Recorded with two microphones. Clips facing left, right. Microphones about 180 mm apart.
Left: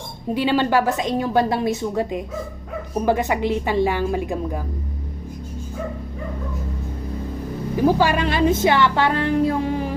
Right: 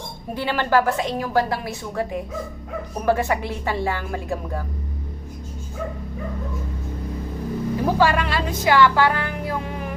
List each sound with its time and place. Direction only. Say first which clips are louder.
0.3 s music: left 2 dB; 20° left (ahead or behind)
3.1 s speech: left 1 dB; 20° left (ahead or behind)
7.9 s music: left 1 dB; 20° left (ahead or behind)